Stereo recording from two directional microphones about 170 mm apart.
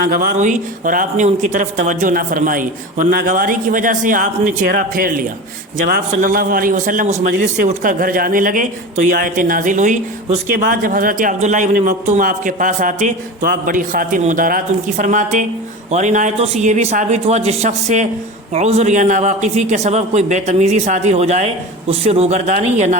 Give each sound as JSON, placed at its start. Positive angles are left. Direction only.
{"t": 0.0, "sound": "a man's voice", "side_deg": -55}